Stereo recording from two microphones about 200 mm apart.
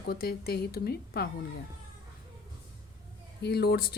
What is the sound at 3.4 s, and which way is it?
Speech, 55° left (ahead or behind).